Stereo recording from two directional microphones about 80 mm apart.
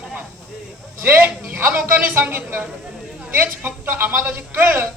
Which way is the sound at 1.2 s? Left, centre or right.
Right.